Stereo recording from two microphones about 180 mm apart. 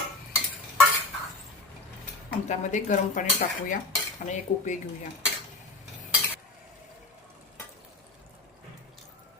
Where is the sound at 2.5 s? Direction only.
45° left (ahead or behind).